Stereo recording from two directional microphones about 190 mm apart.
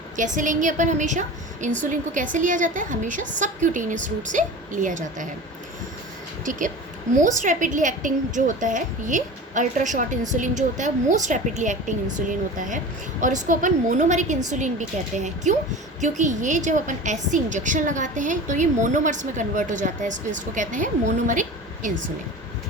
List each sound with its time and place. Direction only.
0.3 s a woman's voice: 40° right (ahead or behind)
6.4 s a woman's voice: 45° right (ahead or behind)